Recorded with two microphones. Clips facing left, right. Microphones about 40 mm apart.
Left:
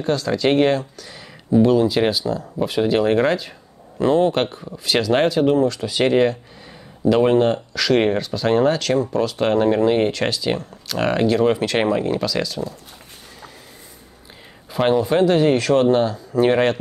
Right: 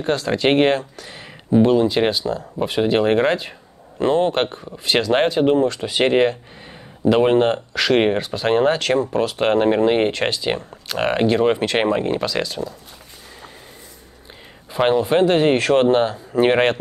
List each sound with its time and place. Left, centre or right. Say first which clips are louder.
0.0 s speech: even; right
1.7 s speech: even; centre
14.7 s speech: right 1 dB; centre